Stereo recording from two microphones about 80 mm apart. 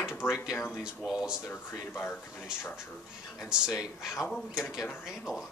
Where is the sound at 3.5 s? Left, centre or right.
Centre.